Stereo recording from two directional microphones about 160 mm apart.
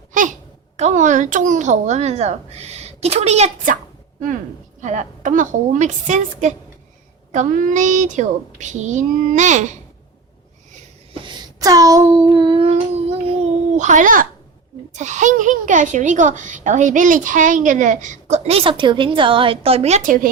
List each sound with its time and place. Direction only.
0.1 s babbling: 55° right (ahead or behind)
0.8 s speech: 50° right (ahead or behind)
4.8 s speech: 50° right (ahead or behind)
11.1 s a sound: 30° right (ahead or behind); by 14.3 s 55° right (ahead or behind)
14.9 s speech: 50° right (ahead or behind)